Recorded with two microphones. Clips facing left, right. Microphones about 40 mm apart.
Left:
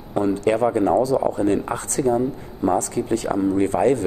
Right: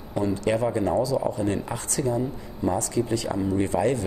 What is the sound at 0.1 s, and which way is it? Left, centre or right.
Speech, left.